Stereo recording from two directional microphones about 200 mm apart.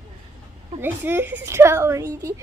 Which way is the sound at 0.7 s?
10° right (ahead or behind).